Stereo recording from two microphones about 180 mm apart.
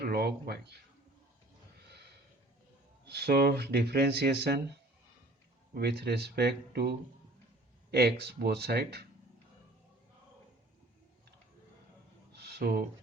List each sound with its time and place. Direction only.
0.0 s speech: 60° right (ahead or behind)
3.1 s speech: 65° right (ahead or behind)
5.7 s speech: 60° right (ahead or behind)
12.3 s a sound: 65° right (ahead or behind)